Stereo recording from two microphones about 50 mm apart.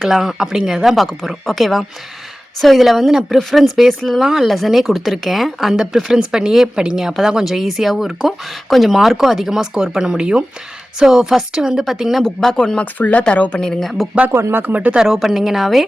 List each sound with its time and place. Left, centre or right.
0.1 s speech: centre
12.2 s speech: centre
12.8 s a woman's voice: left
13.6 s speech: centre
14.3 s speech: right
14.7 s speech: right
14.9 s speech: centre